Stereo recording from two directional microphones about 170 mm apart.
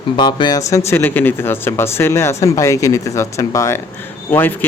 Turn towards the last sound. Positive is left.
turn(degrees=10)  # may be behind; listen again after turning